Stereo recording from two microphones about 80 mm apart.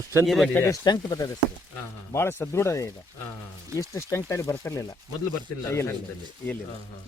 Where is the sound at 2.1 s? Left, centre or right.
Left.